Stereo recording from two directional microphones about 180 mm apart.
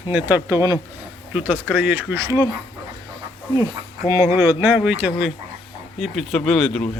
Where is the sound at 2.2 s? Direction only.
20° right (ahead or behind).